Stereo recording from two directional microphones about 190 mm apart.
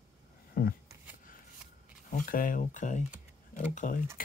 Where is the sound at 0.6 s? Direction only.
50° left (ahead or behind).